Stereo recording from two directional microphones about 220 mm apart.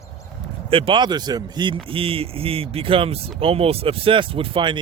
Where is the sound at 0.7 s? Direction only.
25° right (ahead or behind).